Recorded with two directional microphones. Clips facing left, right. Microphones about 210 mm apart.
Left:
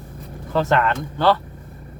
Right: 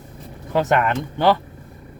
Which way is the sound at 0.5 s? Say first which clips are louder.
Right 1 dB; 15° right (ahead or behind).